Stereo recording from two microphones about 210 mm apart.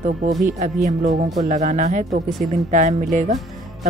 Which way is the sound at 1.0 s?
35° right (ahead or behind).